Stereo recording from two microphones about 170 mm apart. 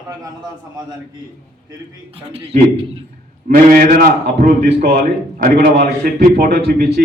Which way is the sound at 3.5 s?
60° right (ahead or behind).